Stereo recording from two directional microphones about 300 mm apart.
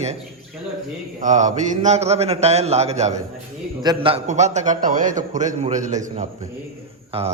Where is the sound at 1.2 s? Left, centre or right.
Right.